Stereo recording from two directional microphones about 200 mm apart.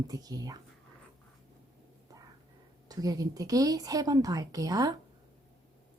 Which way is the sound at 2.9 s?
20° right (ahead or behind).